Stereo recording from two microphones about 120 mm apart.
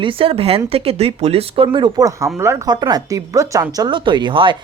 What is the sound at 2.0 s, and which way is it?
Speech, 25° right (ahead or behind).